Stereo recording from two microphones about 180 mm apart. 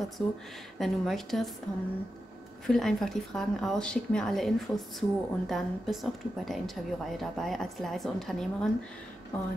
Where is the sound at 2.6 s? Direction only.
Centre (ahead or behind).